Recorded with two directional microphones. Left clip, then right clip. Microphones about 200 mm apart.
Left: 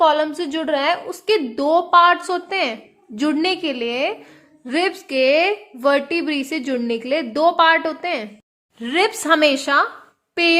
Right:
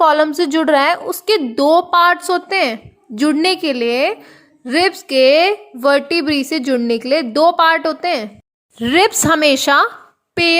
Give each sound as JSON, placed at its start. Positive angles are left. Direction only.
{"t": 0.0, "sound": "a woman's voice", "side_deg": -25}
{"t": 8.8, "sound": "a woman's voice", "side_deg": -30}
{"t": 10.3, "sound": "a sound", "side_deg": -30}